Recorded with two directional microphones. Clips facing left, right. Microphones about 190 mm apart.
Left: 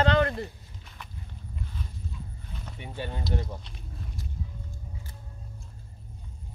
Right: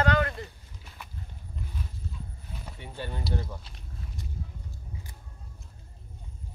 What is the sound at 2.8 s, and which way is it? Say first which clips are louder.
Speech: left 2 dB; 15° left (ahead or behind).